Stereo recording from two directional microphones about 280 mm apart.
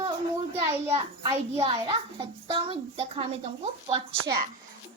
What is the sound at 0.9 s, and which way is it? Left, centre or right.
A child's voice, centre.